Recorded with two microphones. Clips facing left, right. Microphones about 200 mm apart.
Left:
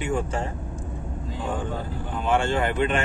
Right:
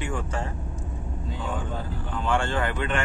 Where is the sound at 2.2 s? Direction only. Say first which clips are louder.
Left 3 dB; 20° left (ahead or behind).